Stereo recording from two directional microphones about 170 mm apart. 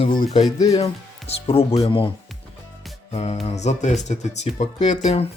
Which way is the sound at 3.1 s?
40° left (ahead or behind).